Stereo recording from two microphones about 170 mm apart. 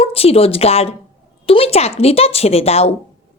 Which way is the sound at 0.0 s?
35° left (ahead or behind).